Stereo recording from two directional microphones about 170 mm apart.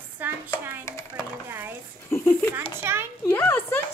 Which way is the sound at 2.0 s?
15° left (ahead or behind).